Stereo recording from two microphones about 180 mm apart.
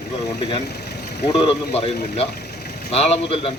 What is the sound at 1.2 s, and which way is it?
Speech, 35° left (ahead or behind).